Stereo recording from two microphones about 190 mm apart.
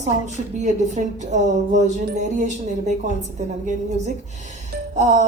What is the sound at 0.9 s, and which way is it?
Speech, 40° right (ahead or behind).